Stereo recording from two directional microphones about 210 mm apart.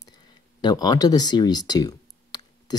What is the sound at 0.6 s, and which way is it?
Speech, 20° left (ahead or behind).